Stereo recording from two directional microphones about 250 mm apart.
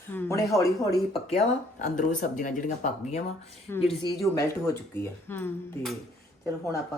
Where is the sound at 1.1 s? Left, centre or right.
Left.